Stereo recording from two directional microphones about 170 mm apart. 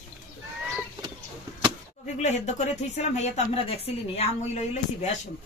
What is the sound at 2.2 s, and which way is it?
A woman's voice, 40° left (ahead or behind).